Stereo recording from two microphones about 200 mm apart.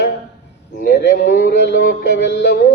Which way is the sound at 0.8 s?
45° left (ahead or behind).